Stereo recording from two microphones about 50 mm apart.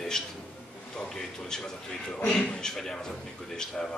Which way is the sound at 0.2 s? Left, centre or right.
Centre.